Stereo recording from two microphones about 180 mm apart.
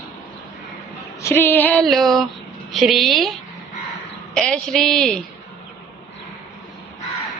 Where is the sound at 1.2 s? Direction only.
10° left (ahead or behind).